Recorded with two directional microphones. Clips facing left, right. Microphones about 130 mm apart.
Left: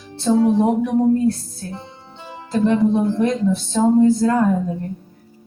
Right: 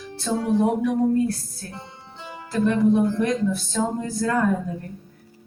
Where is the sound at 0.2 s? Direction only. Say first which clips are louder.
Left 6 dB; 25° left (ahead or behind).